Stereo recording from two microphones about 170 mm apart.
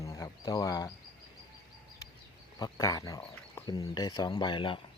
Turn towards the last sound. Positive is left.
turn(degrees=30)  # may be behind; listen again after turning